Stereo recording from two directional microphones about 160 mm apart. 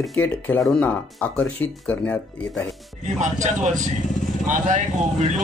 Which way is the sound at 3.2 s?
50° right (ahead or behind).